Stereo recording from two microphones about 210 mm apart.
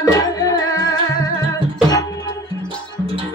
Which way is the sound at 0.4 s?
15° left (ahead or behind).